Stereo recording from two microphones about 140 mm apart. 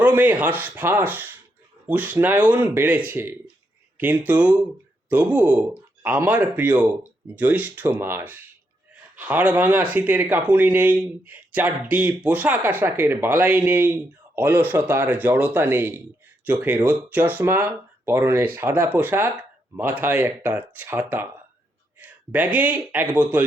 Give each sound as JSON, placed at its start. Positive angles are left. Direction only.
{"t": 0.0, "sound": "speech", "side_deg": -10}